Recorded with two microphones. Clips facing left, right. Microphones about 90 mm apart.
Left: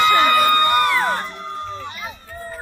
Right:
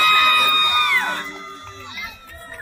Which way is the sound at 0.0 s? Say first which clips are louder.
Left 3 dB; 20° left (ahead or behind).